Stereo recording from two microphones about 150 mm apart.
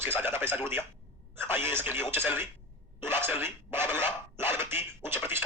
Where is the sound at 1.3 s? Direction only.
15° right (ahead or behind).